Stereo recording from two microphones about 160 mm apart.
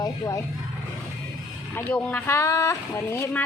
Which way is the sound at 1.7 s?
10° left (ahead or behind).